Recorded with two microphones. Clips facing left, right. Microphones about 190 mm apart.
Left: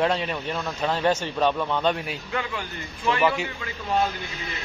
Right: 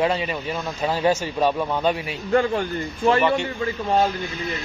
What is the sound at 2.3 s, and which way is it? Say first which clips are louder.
Speech: right 13 dB; 40° right (ahead or behind).